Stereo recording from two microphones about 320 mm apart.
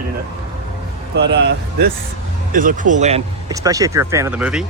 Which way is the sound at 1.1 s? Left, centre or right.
Right.